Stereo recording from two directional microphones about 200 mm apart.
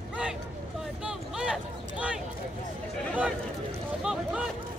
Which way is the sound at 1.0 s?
5° right (ahead or behind).